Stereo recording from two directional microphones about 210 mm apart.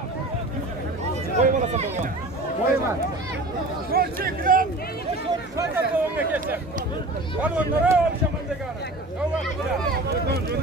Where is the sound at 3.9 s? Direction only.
45° right (ahead or behind).